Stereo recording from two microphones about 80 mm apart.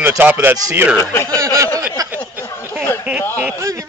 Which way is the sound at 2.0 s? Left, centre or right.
Right.